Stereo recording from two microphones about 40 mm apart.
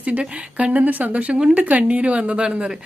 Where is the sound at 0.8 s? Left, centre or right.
Right.